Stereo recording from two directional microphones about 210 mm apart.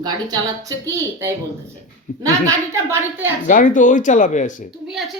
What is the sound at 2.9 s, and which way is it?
Speech, 10° right (ahead or behind).